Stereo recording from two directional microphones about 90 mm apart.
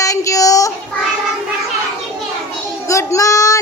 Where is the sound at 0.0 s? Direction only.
35° left (ahead or behind).